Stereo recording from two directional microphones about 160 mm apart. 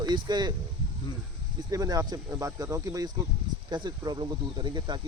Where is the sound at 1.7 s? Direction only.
20° right (ahead or behind).